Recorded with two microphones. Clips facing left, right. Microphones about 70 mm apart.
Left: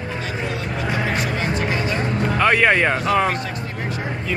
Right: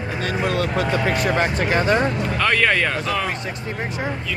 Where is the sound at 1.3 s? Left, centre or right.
Right.